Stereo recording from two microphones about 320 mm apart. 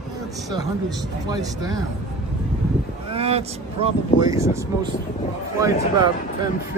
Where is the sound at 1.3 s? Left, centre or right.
Centre.